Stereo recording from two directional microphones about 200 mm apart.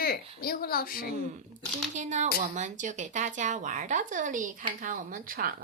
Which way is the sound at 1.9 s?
35° right (ahead or behind).